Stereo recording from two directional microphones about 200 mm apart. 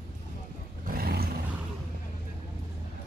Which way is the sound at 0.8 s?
50° right (ahead or behind).